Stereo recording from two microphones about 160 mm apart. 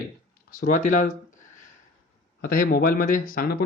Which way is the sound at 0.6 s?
55° left (ahead or behind).